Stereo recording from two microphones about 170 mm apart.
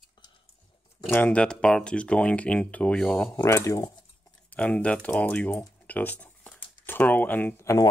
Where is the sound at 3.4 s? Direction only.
15° left (ahead or behind).